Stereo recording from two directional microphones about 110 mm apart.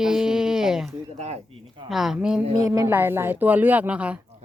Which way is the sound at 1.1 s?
80° right.